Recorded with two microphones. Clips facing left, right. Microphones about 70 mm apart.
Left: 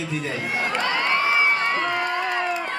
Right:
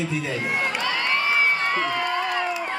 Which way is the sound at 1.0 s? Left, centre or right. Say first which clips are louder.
Left 1 dB; left.